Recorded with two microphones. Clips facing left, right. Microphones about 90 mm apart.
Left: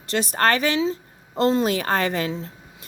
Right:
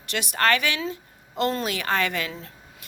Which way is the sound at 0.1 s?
35° left (ahead or behind).